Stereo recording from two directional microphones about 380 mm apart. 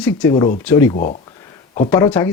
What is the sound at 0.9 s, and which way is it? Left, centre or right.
Speech, left.